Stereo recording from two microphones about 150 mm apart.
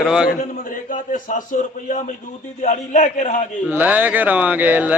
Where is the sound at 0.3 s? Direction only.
65° left (ahead or behind).